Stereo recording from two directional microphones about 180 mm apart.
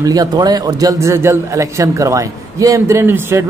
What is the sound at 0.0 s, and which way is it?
A man's voice, 20° right (ahead or behind).